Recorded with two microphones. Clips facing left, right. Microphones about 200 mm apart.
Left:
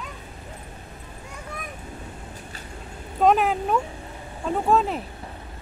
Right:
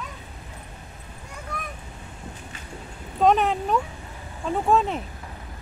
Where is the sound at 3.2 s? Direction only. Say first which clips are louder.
Even; 5° left (ahead or behind).